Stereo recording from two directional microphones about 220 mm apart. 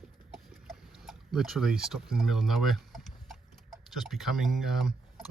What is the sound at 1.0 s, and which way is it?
Speech, centre (ahead or behind).